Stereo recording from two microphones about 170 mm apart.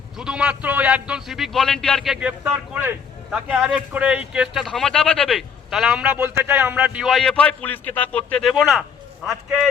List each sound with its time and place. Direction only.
0.2 s speech: 5° right (ahead or behind)